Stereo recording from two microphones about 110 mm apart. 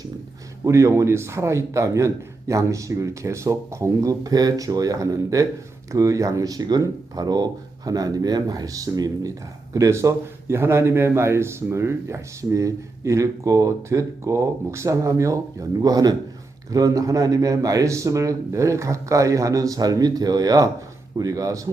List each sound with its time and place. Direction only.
0.6 s a man's voice: 30° right (ahead or behind)